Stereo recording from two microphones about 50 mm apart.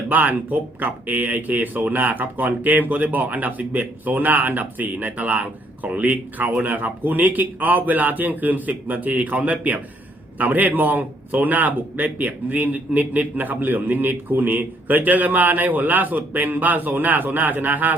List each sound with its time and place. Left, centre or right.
0.1 s speech: right